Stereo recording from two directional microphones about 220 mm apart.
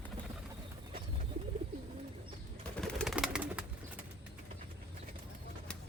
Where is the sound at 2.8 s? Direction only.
Centre (ahead or behind).